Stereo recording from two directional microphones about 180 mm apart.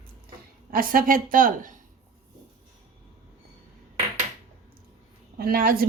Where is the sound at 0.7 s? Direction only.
50° right (ahead or behind).